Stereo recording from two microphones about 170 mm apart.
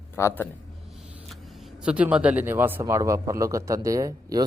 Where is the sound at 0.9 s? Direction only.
5° right (ahead or behind).